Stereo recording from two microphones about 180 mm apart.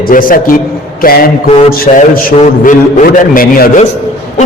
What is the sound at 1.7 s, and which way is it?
A man's voice, 55° left (ahead or behind).